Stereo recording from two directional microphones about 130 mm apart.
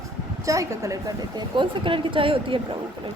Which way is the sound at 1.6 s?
40° right (ahead or behind).